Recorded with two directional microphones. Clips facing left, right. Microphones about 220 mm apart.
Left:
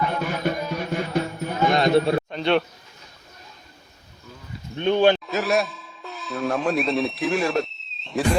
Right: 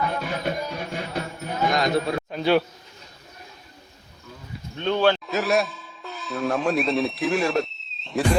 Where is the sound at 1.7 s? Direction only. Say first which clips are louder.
Left 5 dB; 30° left (ahead or behind).